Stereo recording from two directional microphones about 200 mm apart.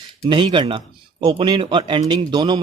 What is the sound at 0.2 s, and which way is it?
Speech, 25° right (ahead or behind).